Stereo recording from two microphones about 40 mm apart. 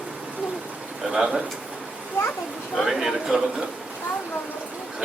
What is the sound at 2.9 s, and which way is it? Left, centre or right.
Speech, centre.